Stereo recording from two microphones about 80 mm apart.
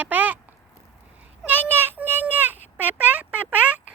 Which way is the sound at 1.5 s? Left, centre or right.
Right.